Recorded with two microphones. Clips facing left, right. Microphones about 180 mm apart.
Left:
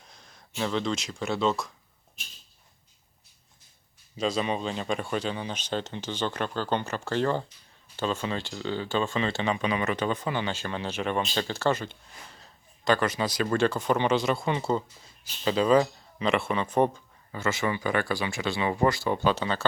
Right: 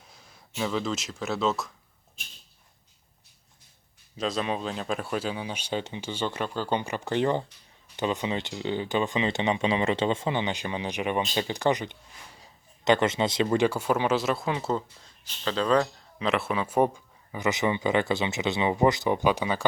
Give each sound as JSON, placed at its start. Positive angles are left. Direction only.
{"t": 0.1, "sound": "speech", "side_deg": -5}
{"t": 4.2, "sound": "speech", "side_deg": 0}